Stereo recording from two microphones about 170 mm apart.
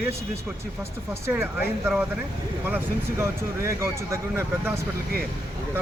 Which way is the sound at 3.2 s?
15° right (ahead or behind).